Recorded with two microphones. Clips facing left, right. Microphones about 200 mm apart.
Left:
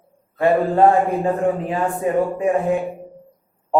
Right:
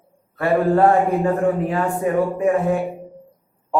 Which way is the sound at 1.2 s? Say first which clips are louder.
Right 1 dB; 20° left (ahead or behind).